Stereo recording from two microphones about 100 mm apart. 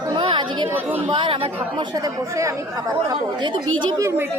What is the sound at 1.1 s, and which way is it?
Speech, 60° right (ahead or behind).